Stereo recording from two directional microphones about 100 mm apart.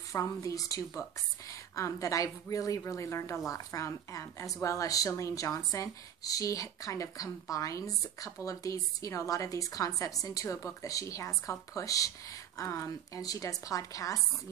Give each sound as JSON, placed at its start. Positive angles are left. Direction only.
{"t": 0.1, "sound": "speech", "side_deg": 35}